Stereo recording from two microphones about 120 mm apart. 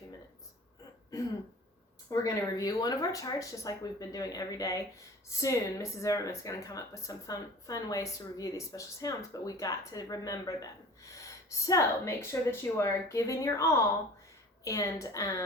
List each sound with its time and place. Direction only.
2.0 s speech: 30° left (ahead or behind)